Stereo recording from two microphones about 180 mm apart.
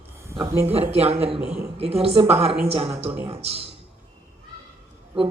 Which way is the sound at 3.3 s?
35° right (ahead or behind).